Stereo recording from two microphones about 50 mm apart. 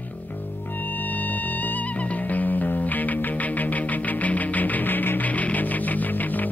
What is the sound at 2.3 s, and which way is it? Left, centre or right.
Music, left.